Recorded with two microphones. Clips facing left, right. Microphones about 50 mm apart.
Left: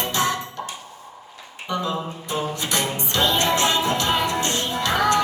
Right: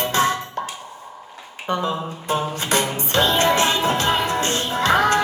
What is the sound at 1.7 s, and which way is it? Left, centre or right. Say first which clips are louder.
Music: right 2 dB; right.